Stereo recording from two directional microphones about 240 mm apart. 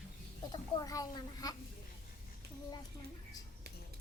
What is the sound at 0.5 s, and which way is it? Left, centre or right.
A child's voice, centre.